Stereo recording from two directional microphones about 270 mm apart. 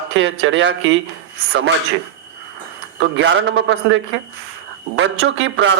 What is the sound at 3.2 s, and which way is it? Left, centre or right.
A man's voice, right.